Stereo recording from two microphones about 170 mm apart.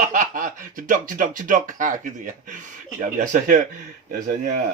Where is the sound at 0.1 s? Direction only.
50° right (ahead or behind).